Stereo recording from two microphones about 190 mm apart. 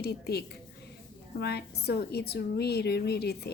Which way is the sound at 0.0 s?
60° left (ahead or behind).